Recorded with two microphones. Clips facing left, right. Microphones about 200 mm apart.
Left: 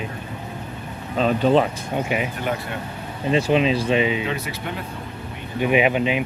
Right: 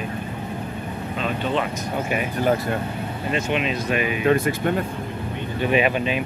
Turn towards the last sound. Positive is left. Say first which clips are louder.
# left 2 dB
turn(degrees=15)  # may be behind; listen again after turning